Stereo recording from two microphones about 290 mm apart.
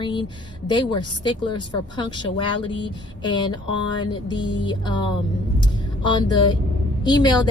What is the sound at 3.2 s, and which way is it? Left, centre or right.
Speech, centre.